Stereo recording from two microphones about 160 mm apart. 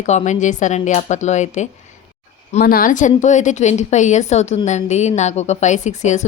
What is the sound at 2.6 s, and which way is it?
A woman's voice, 65° left (ahead or behind).